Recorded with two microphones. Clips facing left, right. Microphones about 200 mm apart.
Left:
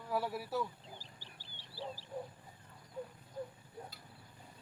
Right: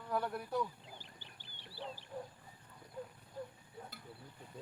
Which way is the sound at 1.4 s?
55° right (ahead or behind).